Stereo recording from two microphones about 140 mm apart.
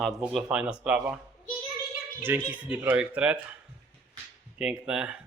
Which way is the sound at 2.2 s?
15° right (ahead or behind).